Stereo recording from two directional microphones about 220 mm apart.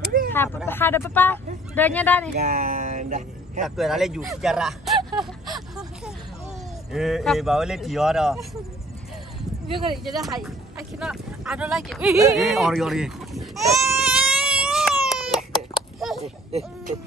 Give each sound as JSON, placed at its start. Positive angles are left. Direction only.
{"t": 0.3, "sound": "a sound", "side_deg": 10}
{"t": 0.7, "sound": "speech", "side_deg": 10}
{"t": 2.3, "sound": "speech", "side_deg": -40}
{"t": 3.6, "sound": "speech", "side_deg": 0}
{"t": 5.2, "sound": "a sound", "side_deg": 0}
{"t": 6.9, "sound": "speech", "side_deg": 0}
{"t": 9.7, "sound": "speech", "side_deg": -25}
{"t": 10.0, "sound": "speech", "side_deg": 0}
{"t": 13.8, "sound": "baby cry", "side_deg": -5}